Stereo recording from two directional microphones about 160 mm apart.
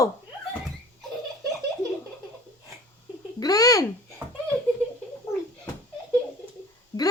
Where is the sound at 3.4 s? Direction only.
20° left (ahead or behind).